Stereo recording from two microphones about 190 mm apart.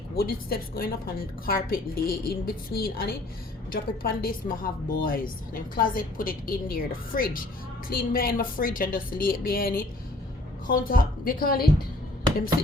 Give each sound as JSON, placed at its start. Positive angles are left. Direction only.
{"t": 0.2, "sound": "a woman's voice", "side_deg": 50}